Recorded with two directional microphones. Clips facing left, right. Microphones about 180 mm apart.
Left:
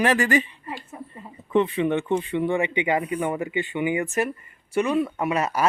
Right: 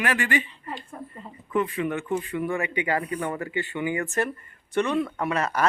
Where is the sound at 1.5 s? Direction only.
25° left (ahead or behind).